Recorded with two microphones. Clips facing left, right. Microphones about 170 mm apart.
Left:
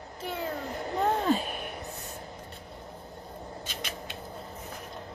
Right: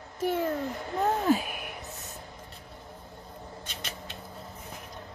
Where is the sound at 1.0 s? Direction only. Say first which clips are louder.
Right 1 dB; 10° right (ahead or behind).